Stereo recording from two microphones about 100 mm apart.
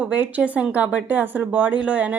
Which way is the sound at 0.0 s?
15° right (ahead or behind).